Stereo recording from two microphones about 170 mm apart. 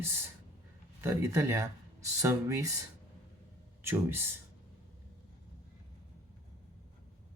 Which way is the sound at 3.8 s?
15° right (ahead or behind).